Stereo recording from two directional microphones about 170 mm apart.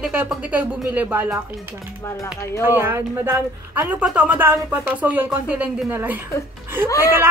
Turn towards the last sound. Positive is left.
turn(degrees=20)  # may be behind; listen again after turning